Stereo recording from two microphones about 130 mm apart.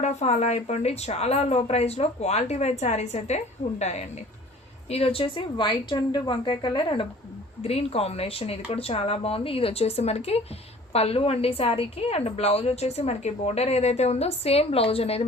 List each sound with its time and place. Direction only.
0.0 s speech: 60° left (ahead or behind)
4.9 s a woman's voice: 50° left (ahead or behind)
7.6 s a woman's voice: 50° left (ahead or behind)